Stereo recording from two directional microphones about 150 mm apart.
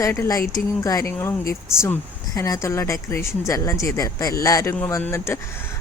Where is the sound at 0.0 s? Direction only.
20° left (ahead or behind).